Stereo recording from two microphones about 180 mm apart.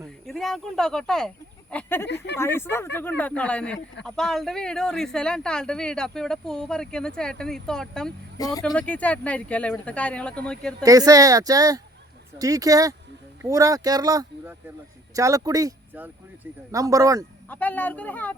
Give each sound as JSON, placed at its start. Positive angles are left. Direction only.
{"t": 0.3, "sound": "speech", "side_deg": 0}
{"t": 2.0, "sound": "speech", "side_deg": 70}
{"t": 2.4, "sound": "speech", "side_deg": 15}
{"t": 8.4, "sound": "speech", "side_deg": 20}
{"t": 8.6, "sound": "speech", "side_deg": 5}
{"t": 10.8, "sound": "speech", "side_deg": -20}
{"t": 17.5, "sound": "speech", "side_deg": 10}